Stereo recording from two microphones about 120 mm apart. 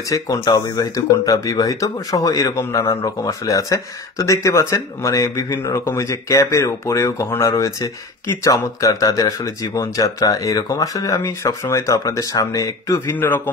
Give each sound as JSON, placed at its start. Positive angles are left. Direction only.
{"t": 0.1, "sound": "speech", "side_deg": 30}
{"t": 13.1, "sound": "speech", "side_deg": 15}